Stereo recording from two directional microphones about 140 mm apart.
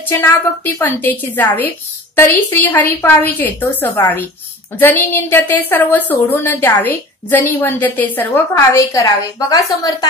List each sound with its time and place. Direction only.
0.0 s a woman's voice: 15° left (ahead or behind)